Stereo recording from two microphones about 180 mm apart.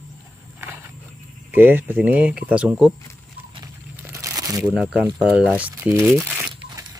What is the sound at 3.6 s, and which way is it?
Crumpling, 20° right (ahead or behind).